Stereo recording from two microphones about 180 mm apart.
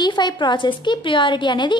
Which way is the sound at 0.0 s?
25° left (ahead or behind).